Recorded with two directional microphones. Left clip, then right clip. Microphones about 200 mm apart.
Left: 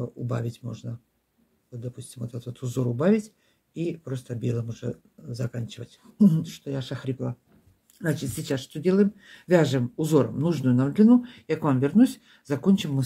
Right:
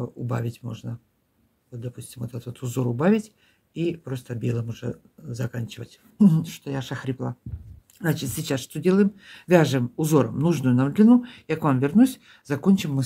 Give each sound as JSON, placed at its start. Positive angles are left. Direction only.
{"t": 0.0, "sound": "speech", "side_deg": -25}